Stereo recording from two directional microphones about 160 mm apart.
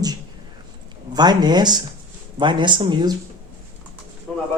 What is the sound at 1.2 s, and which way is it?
Speech, 25° right (ahead or behind).